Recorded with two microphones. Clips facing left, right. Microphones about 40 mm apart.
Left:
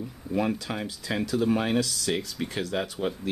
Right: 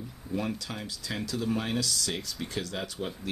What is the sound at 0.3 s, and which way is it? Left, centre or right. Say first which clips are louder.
Speech: left 5 dB; left.